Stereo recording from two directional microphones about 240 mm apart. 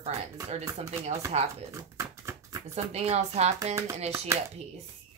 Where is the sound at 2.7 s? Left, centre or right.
Right.